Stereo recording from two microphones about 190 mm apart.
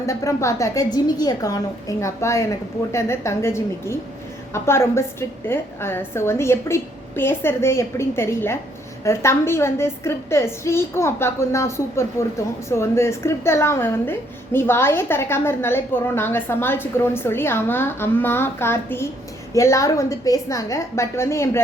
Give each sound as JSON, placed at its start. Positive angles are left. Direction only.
{"t": 0.0, "sound": "a woman's voice", "side_deg": 15}